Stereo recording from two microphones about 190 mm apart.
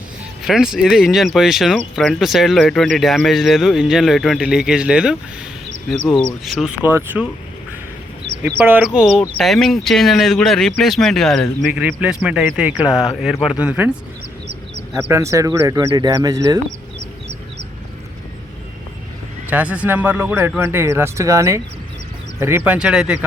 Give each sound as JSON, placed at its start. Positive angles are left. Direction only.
{"t": 0.4, "sound": "speech", "side_deg": -5}
{"t": 8.5, "sound": "speech", "side_deg": -10}
{"t": 15.1, "sound": "speech", "side_deg": -15}
{"t": 19.5, "sound": "speech", "side_deg": -10}